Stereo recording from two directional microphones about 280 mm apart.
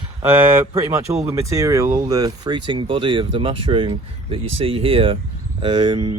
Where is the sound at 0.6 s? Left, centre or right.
Centre.